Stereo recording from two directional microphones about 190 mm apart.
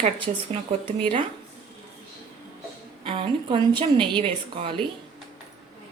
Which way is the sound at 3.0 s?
30° right (ahead or behind).